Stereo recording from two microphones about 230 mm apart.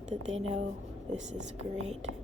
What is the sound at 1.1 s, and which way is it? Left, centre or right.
Speech, right.